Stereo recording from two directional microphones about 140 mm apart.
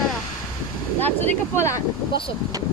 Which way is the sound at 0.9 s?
15° left (ahead or behind).